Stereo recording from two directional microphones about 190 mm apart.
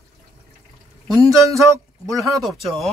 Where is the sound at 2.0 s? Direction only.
15° right (ahead or behind).